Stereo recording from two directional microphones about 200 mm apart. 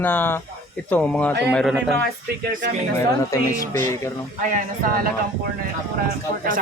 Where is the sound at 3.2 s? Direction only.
15° left (ahead or behind).